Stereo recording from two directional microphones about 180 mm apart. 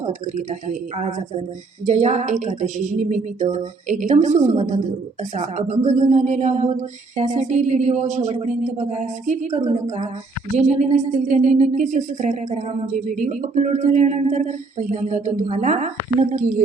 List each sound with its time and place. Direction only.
0.0 s speech: 40° right (ahead or behind)
10.6 s speech: 40° right (ahead or behind)